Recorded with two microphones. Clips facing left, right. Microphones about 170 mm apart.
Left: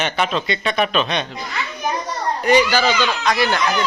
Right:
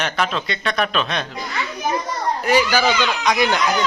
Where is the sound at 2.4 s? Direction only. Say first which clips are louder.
Left 2 dB; 5° right (ahead or behind).